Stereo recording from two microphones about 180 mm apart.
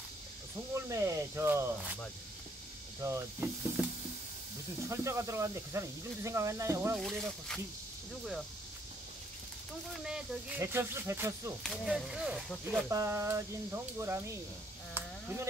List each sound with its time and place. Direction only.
0.7 s speech: 15° right (ahead or behind)
3.0 s speech: 15° right (ahead or behind)
4.8 s speech: 15° right (ahead or behind)
7.0 s speech: 5° left (ahead or behind)
10.0 s speech: 5° right (ahead or behind)
11.6 s speech: 5° right (ahead or behind)
12.8 s speech: 15° right (ahead or behind)